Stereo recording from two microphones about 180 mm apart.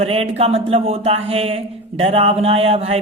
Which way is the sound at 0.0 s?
35° right (ahead or behind).